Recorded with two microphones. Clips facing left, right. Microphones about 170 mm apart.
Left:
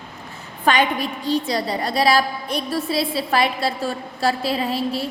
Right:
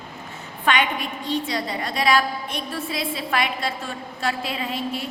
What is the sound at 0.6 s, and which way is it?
A woman's voice, 35° left (ahead or behind).